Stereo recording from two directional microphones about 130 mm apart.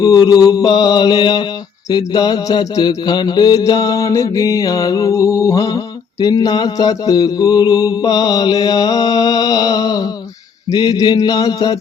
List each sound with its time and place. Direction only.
0.0 s mantra: 30° left (ahead or behind)